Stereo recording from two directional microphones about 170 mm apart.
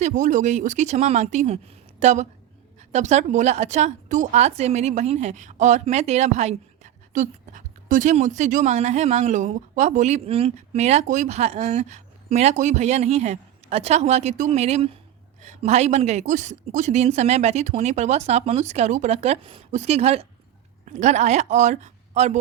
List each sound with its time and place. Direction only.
0.0 s a woman's voice: 45° right (ahead or behind)